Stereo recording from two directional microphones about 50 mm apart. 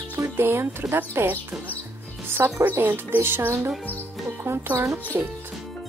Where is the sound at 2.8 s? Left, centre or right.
Right.